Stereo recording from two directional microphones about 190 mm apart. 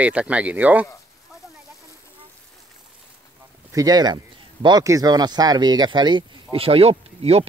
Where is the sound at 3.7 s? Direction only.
20° right (ahead or behind).